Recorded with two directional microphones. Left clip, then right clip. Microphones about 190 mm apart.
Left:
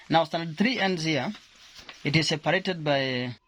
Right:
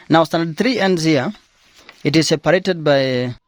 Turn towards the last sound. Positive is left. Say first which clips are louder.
# right 11 dB
turn(degrees=-60)  # may be behind; listen again after turning